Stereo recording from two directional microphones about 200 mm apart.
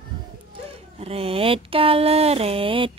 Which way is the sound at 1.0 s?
30° right (ahead or behind).